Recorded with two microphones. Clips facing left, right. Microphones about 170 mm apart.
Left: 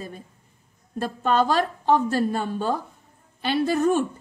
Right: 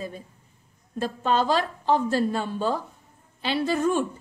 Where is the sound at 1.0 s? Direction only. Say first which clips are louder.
Left 2 dB; 55° left (ahead or behind).